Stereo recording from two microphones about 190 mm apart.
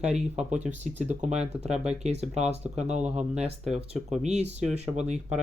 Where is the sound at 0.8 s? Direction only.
35° right (ahead or behind).